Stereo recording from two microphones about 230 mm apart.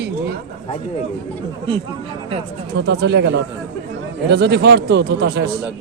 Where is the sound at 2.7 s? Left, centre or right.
Right.